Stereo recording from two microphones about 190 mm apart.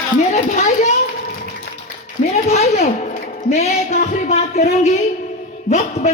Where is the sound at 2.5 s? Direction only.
35° left (ahead or behind).